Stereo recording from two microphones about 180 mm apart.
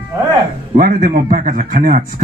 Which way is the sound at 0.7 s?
50° right (ahead or behind).